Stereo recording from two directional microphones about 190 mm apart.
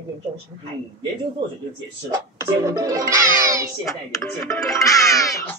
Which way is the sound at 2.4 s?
15° right (ahead or behind).